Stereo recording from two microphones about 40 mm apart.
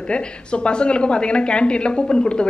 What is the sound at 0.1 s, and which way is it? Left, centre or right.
A woman's voice, left.